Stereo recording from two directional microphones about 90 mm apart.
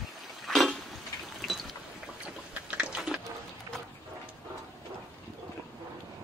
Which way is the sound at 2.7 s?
15° right (ahead or behind).